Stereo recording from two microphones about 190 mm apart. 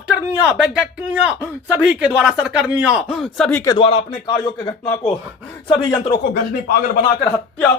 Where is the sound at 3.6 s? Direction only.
25° left (ahead or behind).